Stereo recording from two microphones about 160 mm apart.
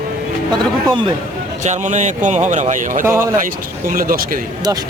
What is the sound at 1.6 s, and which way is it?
Speech, 45° right (ahead or behind).